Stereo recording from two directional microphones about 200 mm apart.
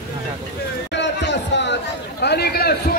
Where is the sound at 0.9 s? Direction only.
60° left (ahead or behind).